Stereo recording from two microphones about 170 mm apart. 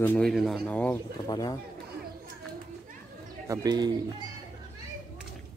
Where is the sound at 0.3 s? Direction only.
Centre (ahead or behind).